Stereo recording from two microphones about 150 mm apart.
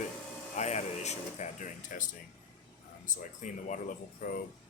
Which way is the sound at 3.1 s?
60° left (ahead or behind).